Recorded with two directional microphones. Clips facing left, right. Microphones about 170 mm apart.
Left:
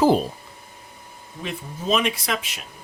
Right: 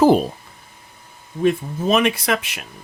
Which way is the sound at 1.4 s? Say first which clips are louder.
Right 9 dB; 60° right (ahead or behind).